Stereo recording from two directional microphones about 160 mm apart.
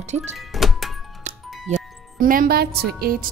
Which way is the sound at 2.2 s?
60° right (ahead or behind).